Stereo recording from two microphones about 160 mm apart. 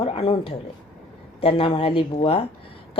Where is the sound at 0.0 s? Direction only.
35° left (ahead or behind).